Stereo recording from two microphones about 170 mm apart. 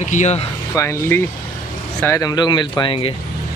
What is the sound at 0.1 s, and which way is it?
Speech, 40° left (ahead or behind).